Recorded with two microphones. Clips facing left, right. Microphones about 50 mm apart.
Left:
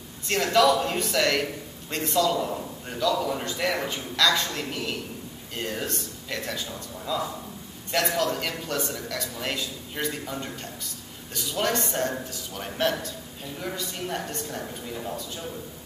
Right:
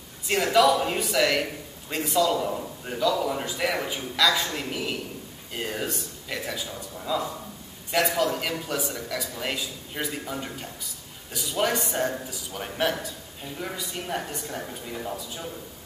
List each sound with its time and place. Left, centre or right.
0.3 s a man's voice: centre